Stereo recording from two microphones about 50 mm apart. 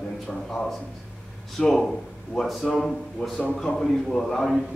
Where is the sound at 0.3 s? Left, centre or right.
Centre.